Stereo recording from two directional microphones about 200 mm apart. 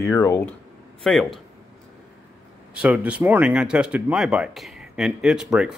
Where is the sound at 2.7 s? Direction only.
5° right (ahead or behind).